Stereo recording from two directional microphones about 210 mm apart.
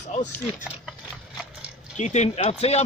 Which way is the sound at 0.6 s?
Centre (ahead or behind).